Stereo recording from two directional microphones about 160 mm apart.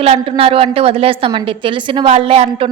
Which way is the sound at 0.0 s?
35° right (ahead or behind).